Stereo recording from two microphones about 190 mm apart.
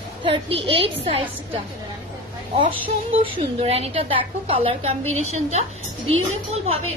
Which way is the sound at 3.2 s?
30° right (ahead or behind).